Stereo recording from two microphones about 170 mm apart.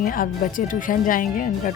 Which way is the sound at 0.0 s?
55° left (ahead or behind).